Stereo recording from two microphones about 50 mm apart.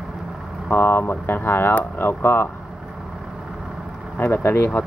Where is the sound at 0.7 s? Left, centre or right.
Left.